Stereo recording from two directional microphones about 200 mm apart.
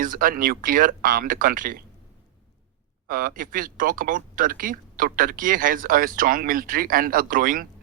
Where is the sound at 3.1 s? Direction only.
45° right (ahead or behind).